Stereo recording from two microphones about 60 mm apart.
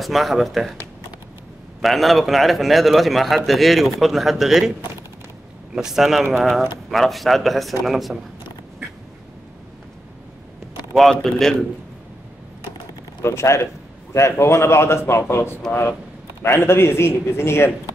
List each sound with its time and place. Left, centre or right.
0.0 s a man's voice: centre
1.8 s a man's voice: centre
5.8 s a man's voice: centre
11.0 s a man's voice: centre
13.2 s a man's voice: left